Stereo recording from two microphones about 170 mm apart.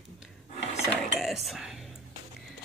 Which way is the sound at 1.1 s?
Centre (ahead or behind).